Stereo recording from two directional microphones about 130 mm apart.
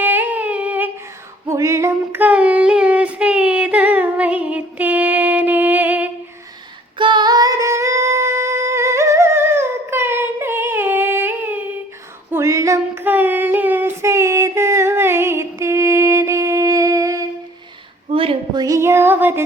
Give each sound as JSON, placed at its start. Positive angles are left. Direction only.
{"t": 0.0, "sound": "humming", "side_deg": -15}
{"t": 1.5, "sound": "female singing", "side_deg": -20}
{"t": 7.0, "sound": "singing", "side_deg": -35}
{"t": 12.3, "sound": "female singing", "side_deg": -20}
{"t": 13.1, "sound": "female singing", "side_deg": -15}
{"t": 18.1, "sound": "a sound", "side_deg": -45}
{"t": 18.6, "sound": "music", "side_deg": -20}